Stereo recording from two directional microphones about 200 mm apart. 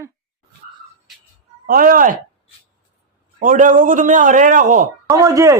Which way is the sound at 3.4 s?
40° right (ahead or behind).